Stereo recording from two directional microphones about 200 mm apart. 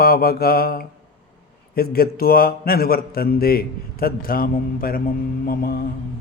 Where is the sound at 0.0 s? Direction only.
50° left (ahead or behind).